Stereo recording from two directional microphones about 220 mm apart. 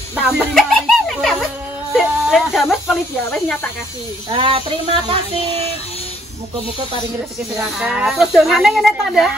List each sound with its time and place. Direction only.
0.1 s a sound: centre (ahead or behind)
2.0 s snake: centre (ahead or behind)
4.3 s speech: 25° right (ahead or behind)
7.5 s a woman's voice: 5° right (ahead or behind)